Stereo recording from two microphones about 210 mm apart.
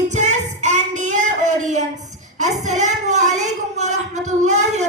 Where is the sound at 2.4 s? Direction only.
35° right (ahead or behind).